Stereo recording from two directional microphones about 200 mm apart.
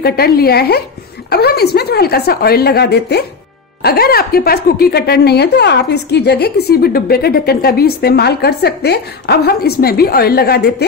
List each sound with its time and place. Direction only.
0.0 s a woman's voice: 50° left (ahead or behind)